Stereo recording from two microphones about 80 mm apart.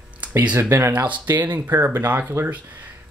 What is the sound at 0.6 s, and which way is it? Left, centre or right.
Speech, right.